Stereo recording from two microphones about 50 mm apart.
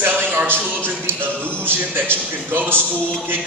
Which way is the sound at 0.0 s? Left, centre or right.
Right.